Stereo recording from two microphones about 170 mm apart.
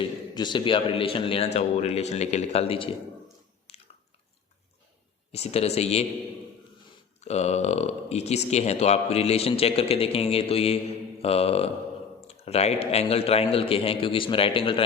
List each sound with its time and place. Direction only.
0.0 s a man's voice: 25° left (ahead or behind)
3.7 s chewing: 35° left (ahead or behind)
5.3 s a man's voice: 40° left (ahead or behind)
7.2 s a man's voice: 40° left (ahead or behind)